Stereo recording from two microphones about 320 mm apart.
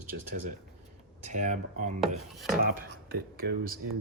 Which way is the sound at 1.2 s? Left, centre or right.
Right.